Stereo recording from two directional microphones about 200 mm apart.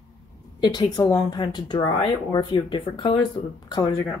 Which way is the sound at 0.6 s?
20° left (ahead or behind).